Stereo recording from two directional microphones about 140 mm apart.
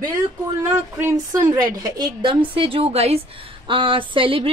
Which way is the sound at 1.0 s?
25° right (ahead or behind).